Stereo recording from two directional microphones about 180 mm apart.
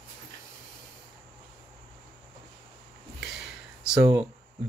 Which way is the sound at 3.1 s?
5° right (ahead or behind).